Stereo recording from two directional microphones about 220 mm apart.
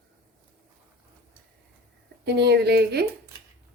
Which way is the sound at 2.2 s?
50° right (ahead or behind).